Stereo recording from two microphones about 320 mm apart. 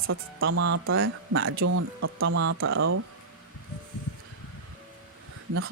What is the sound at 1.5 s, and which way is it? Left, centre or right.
Speech, right.